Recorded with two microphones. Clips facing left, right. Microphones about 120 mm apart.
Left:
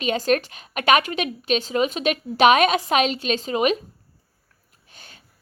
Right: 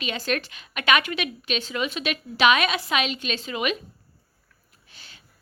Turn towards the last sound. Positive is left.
turn(degrees=45)  # may be behind; listen again after turning